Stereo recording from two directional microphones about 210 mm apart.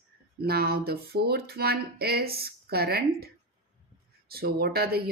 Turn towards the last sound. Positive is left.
turn(degrees=-50)  # may be behind; listen again after turning